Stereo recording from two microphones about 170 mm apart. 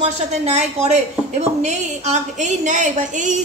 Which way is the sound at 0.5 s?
40° right (ahead or behind).